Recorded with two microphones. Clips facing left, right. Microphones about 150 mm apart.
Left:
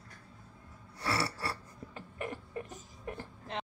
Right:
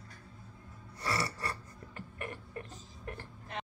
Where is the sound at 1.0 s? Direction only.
5° left (ahead or behind).